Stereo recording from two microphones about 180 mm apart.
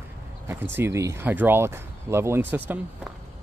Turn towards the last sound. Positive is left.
turn(degrees=-10)  # may be behind; listen again after turning